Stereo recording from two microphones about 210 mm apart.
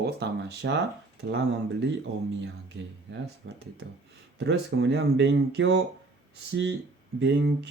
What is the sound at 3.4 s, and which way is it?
Speech, 60° right (ahead or behind).